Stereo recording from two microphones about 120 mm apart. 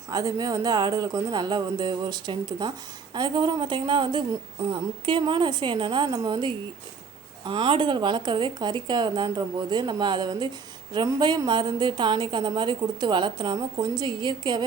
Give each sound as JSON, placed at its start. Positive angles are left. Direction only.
{"t": 0.1, "sound": "speech", "side_deg": -30}